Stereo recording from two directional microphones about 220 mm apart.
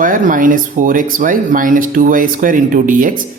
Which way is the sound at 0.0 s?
40° right (ahead or behind).